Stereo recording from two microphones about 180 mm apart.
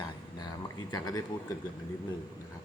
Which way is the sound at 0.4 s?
20° left (ahead or behind).